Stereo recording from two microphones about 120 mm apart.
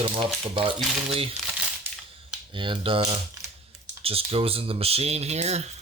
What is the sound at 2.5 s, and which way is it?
Speech, 45° right (ahead or behind).